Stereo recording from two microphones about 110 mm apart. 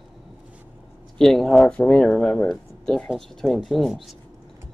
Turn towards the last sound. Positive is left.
turn(degrees=0)  # may be behind; listen again after turning